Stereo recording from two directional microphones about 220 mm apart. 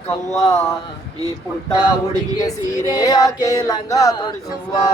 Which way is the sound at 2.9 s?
15° left (ahead or behind).